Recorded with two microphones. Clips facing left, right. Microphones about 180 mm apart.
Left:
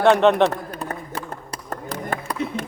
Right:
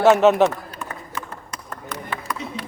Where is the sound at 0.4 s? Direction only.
35° left (ahead or behind).